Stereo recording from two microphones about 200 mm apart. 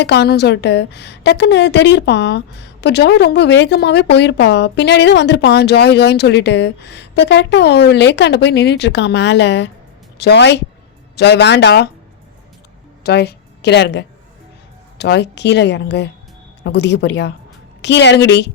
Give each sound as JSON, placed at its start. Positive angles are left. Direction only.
{"t": 0.0, "sound": "a woman's voice", "side_deg": 55}
{"t": 13.0, "sound": "a woman's voice", "side_deg": 55}